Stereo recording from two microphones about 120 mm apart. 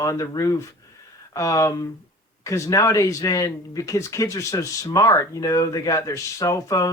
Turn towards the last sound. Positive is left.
turn(degrees=30)  # may be behind; listen again after turning